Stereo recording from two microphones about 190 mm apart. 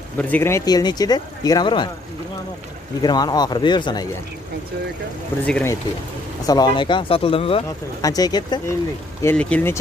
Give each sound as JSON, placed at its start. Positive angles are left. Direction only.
{"t": 0.2, "sound": "speech", "side_deg": 10}
{"t": 3.0, "sound": "speech", "side_deg": 20}
{"t": 5.5, "sound": "speech", "side_deg": 10}
{"t": 8.0, "sound": "speech", "side_deg": 20}
{"t": 9.2, "sound": "speech", "side_deg": 10}